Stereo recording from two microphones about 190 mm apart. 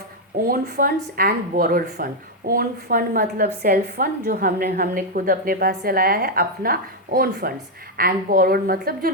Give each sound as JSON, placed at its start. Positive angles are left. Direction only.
{"t": 0.3, "sound": "a woman's voice", "side_deg": -50}